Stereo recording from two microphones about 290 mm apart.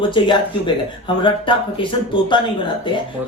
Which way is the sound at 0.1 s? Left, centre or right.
Centre.